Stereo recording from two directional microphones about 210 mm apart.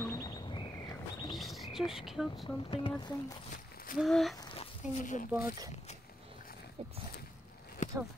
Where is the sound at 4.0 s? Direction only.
Centre (ahead or behind).